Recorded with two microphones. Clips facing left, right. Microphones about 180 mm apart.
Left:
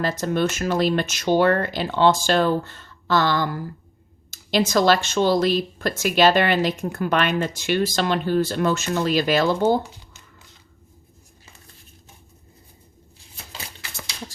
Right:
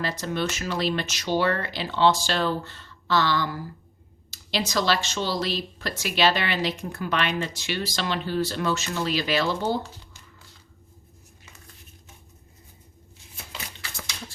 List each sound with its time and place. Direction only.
0.0 s speech: 45° left (ahead or behind)